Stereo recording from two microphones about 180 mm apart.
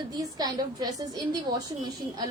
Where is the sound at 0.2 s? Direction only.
20° right (ahead or behind).